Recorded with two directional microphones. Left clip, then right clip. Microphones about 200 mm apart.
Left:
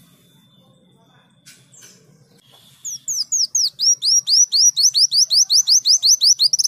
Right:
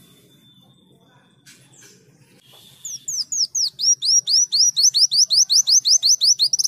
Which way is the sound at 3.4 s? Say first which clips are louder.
Left 2 dB; 5° right (ahead or behind).